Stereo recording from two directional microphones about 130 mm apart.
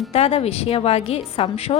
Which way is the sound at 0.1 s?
50° left (ahead or behind).